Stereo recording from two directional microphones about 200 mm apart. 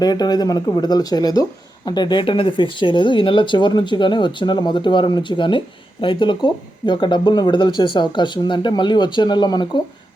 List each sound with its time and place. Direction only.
0.0 s speech: 20° left (ahead or behind)